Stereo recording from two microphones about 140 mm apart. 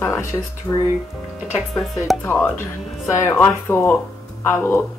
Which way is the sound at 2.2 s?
15° left (ahead or behind).